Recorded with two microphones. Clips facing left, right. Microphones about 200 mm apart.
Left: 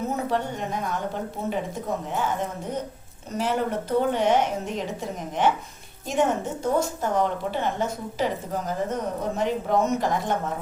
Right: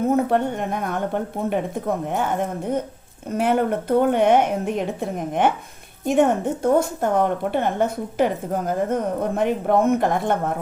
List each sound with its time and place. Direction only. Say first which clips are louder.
0.0 s a woman's voice: right 7 dB; 55° right (ahead or behind)